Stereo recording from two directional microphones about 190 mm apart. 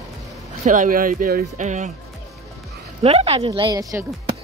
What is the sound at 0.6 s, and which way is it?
Speech, 45° right (ahead or behind).